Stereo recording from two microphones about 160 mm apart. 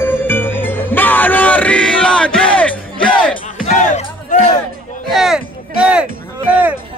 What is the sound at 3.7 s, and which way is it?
Music, 50° left (ahead or behind).